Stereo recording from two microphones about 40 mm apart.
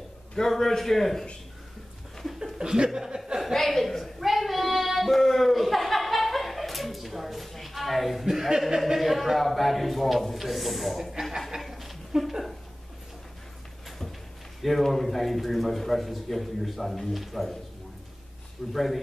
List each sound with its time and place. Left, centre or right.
0.4 s a man's voice: centre
2.6 s speech: centre
3.5 s a man's voice: centre
4.2 s a sound: centre
8.3 s a man's voice: centre
11.6 s a sound: centre
14.6 s a man's voice: centre
18.7 s a man's voice: centre